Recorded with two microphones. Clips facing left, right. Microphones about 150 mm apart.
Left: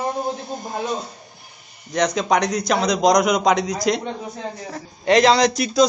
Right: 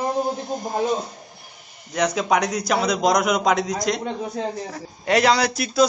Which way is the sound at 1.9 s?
10° right (ahead or behind).